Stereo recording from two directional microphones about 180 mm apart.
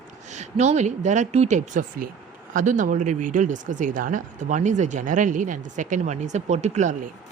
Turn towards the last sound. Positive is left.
turn(degrees=-40)  # may be behind; listen again after turning